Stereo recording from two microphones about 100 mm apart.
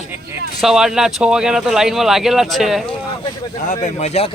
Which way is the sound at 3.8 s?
90° left.